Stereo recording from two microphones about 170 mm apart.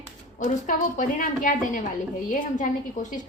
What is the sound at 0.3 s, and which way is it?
A woman's voice, 50° left (ahead or behind).